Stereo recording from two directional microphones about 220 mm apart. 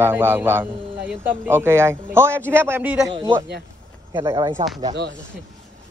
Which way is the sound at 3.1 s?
20° right (ahead or behind).